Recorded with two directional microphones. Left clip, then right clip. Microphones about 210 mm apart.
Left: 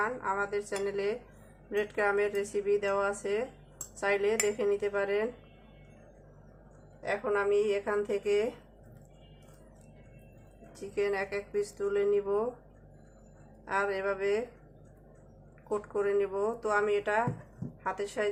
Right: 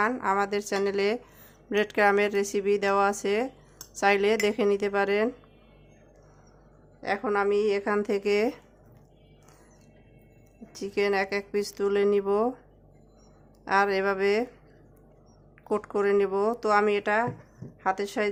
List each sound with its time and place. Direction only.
0.0 s speech: 55° right (ahead or behind)
7.0 s speech: 45° right (ahead or behind)
10.8 s speech: 50° right (ahead or behind)
13.7 s speech: 55° right (ahead or behind)
15.7 s speech: 50° right (ahead or behind)